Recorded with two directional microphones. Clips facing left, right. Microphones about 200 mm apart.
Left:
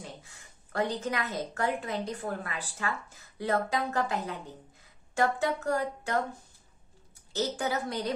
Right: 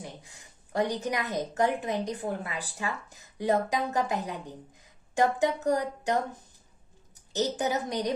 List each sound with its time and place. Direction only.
0.0 s speech: 15° right (ahead or behind)
7.3 s speech: 15° right (ahead or behind)